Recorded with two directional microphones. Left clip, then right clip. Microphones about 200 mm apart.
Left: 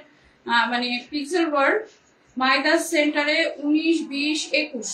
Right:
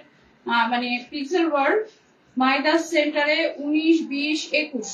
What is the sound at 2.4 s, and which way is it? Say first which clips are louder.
A woman's voice: even; 20° left (ahead or behind).